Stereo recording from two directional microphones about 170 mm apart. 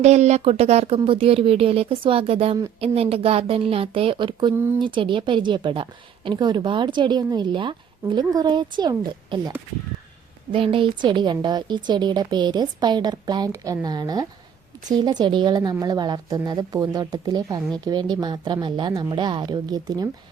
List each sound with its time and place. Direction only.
0.0 s speech: 40° right (ahead or behind)
4.5 s speech: 15° right (ahead or behind)
4.8 s a woman's voice: 30° right (ahead or behind)
10.5 s a woman's voice: 30° right (ahead or behind)